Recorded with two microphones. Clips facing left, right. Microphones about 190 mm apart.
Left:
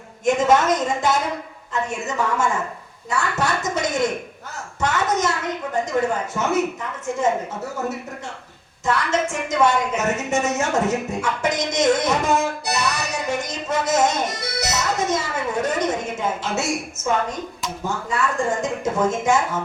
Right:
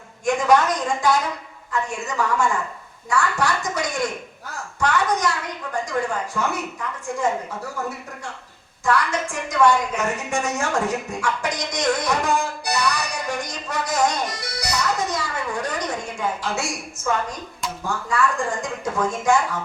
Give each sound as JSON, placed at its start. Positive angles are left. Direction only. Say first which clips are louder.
{"t": 0.3, "sound": "speech", "louder": "left 1 dB", "side_deg": 25}
{"t": 8.8, "sound": "a woman's voice", "louder": "left 1 dB", "side_deg": 20}